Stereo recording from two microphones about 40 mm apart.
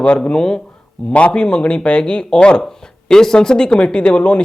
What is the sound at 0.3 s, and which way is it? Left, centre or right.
Speech, centre.